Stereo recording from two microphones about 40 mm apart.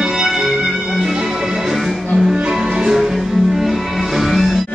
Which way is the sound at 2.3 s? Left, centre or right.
Right.